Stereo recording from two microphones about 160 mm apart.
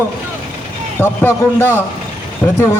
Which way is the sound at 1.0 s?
15° left (ahead or behind).